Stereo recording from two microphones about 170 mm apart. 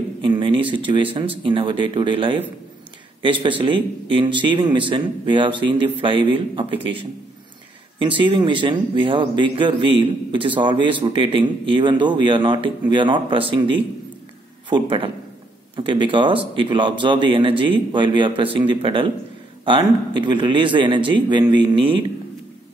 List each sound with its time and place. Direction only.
0.2 s a sound: 30° right (ahead or behind)
0.8 s speech: 30° right (ahead or behind)
8.0 s speech: 30° right (ahead or behind)